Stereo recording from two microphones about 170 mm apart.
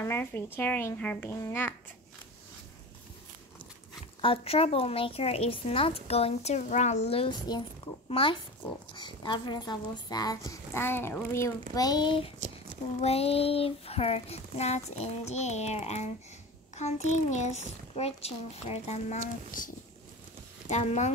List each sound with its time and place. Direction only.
0.0 s speech: 15° left (ahead or behind)
4.2 s child singing: 35° left (ahead or behind)
7.1 s speech: 30° left (ahead or behind)
8.1 s child singing: 30° left (ahead or behind)
8.9 s speech: 25° left (ahead or behind)
13.0 s child singing: 35° left (ahead or behind)
20.7 s child singing: 40° left (ahead or behind)